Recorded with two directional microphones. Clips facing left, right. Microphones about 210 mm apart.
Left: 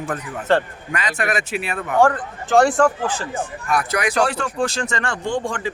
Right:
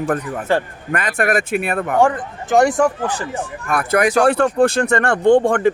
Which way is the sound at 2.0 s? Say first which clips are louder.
Right 1 dB; 15° right (ahead or behind).